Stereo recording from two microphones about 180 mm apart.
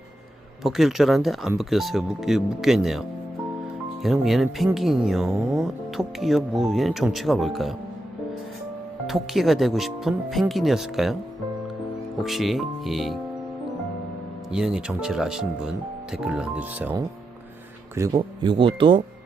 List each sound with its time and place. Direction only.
0.6 s speech: centre (ahead or behind)
4.0 s speech: centre (ahead or behind)
9.0 s speech: centre (ahead or behind)
12.2 s speech: centre (ahead or behind)
14.5 s a man's voice: 5° right (ahead or behind)
18.2 s speech: 30° right (ahead or behind)